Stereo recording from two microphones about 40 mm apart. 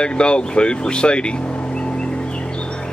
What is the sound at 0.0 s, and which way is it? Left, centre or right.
Speech, left.